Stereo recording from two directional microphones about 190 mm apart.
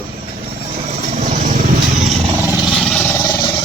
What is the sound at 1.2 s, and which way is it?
Vehicle, 40° right (ahead or behind).